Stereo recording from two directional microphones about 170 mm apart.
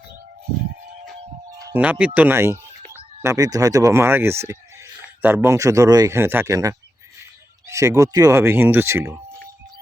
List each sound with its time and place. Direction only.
1.7 s a man's voice: 10° right (ahead or behind)